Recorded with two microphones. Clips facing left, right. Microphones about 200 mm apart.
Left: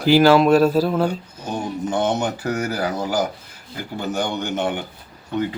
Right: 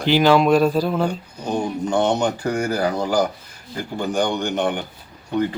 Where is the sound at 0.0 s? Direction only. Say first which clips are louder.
Left 2 dB; 5° left (ahead or behind).